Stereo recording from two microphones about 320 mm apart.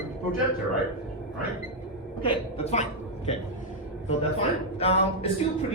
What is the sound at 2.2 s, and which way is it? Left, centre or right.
Speech, centre.